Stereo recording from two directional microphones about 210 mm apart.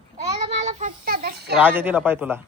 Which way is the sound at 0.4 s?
30° right (ahead or behind).